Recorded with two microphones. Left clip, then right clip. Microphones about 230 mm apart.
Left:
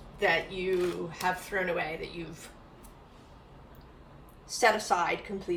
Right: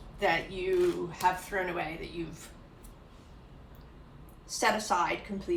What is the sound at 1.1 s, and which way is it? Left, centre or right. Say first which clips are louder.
A woman's voice: right 2 dB; centre.